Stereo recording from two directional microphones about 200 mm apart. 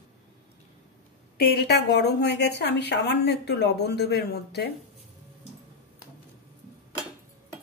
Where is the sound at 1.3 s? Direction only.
55° left (ahead or behind).